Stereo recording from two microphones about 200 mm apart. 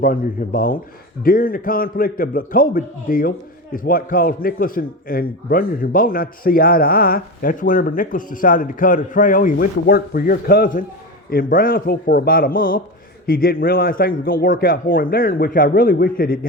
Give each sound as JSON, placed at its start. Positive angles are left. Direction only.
{"t": 0.0, "sound": "a man's voice", "side_deg": 45}